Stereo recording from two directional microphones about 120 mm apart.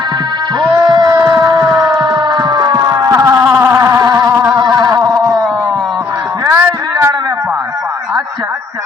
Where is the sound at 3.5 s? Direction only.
25° right (ahead or behind).